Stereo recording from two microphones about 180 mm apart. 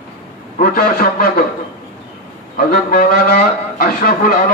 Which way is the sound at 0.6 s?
55° left (ahead or behind).